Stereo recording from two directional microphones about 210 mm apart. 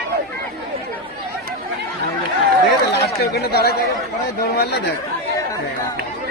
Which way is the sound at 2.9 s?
50° left (ahead or behind).